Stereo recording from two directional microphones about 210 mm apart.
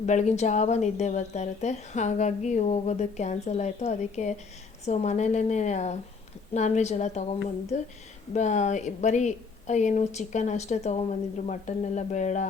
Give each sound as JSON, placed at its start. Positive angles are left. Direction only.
{"t": 0.0, "sound": "speech", "side_deg": 35}